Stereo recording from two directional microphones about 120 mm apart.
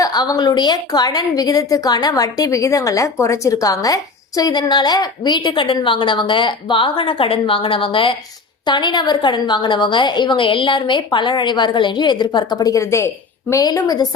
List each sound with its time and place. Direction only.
0.0 s a woman's voice: 30° left (ahead or behind)